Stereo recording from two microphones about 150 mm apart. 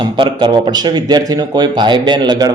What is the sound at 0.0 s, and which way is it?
Speech, 30° right (ahead or behind).